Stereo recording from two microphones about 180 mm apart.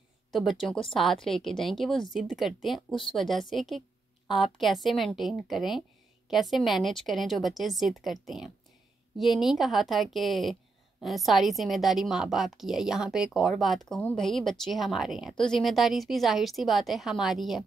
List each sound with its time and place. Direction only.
0.3 s a woman's voice: centre (ahead or behind)